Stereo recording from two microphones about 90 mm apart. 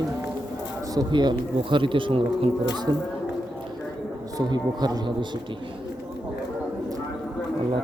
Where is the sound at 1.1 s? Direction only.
55° right (ahead or behind).